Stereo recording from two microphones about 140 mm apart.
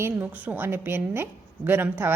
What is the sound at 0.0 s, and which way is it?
A woman's voice, 10° right (ahead or behind).